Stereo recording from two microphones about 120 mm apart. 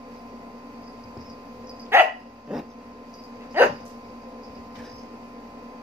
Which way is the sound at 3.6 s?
20° right (ahead or behind).